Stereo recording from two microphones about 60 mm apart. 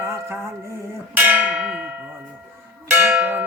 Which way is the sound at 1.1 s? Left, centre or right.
Right.